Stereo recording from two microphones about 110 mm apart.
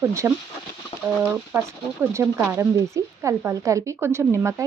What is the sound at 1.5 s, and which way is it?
Speech, 20° right (ahead or behind).